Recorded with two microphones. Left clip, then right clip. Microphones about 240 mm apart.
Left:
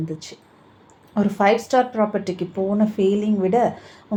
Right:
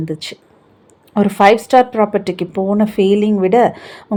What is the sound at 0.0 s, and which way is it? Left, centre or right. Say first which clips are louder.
Speech: right 7 dB; right.